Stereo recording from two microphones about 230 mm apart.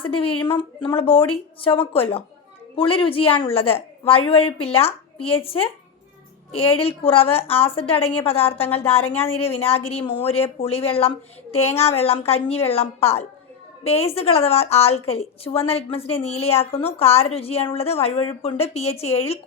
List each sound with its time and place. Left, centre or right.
0.0 s a woman's voice: left